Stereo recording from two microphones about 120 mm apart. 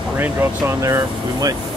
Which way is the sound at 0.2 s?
25° right (ahead or behind).